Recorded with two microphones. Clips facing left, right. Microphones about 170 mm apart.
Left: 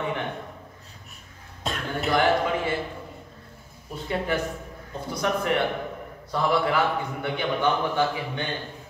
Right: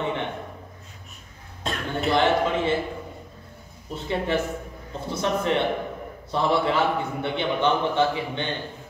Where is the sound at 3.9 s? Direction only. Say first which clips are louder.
Right 2 dB; 25° right (ahead or behind).